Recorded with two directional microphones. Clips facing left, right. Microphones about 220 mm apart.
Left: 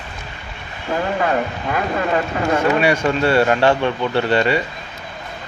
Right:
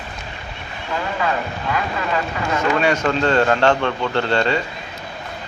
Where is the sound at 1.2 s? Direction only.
40° left (ahead or behind).